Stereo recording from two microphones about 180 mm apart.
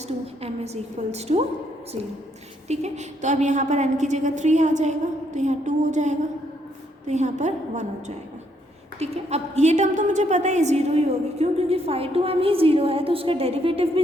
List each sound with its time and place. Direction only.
0.4 s a woman's voice: 35° right (ahead or behind)
2.6 s a woman's voice: 40° right (ahead or behind)